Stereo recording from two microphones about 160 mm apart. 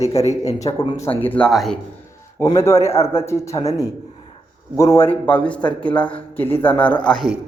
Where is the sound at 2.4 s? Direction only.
15° left (ahead or behind).